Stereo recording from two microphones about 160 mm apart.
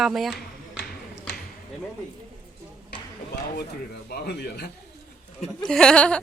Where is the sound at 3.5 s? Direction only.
80° left.